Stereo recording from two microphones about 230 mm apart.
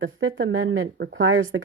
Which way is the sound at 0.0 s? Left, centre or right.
Right.